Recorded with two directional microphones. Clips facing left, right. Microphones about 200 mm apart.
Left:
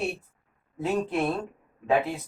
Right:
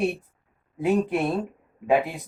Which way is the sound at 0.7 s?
15° right (ahead or behind).